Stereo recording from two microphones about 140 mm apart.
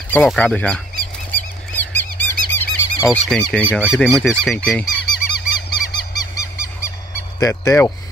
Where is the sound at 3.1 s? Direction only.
5° left (ahead or behind).